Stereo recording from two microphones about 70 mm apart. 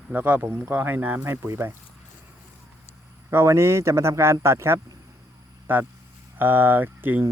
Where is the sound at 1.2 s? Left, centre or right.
Right.